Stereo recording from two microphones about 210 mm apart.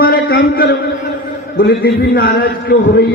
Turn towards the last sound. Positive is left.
turn(degrees=45)  # may be behind; listen again after turning